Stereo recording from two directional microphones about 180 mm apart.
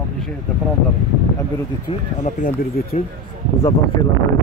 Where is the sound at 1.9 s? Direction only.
35° left (ahead or behind).